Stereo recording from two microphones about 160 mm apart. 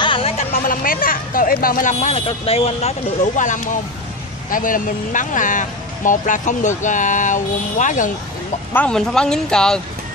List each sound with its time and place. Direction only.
0.0 s a sound: 35° left (ahead or behind)
0.5 s speech: 60° left (ahead or behind); by 2.9 s 40° left (ahead or behind)
3.3 s speech: 50° left (ahead or behind)
8.7 s speech: 5° left (ahead or behind)